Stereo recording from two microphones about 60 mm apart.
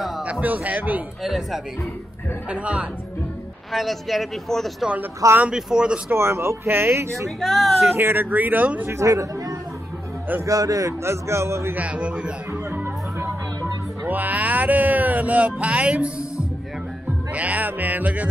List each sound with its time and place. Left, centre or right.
0.2 s speech: right
1.2 s speech: centre
2.5 s speech: right
3.7 s speech: centre
5.5 s speech: centre
6.0 s speech: right
7.2 s speech: centre
7.9 s speech: right
9.0 s a man's voice: right
11.7 s speech: right
14.0 s speech: right
17.3 s speech: right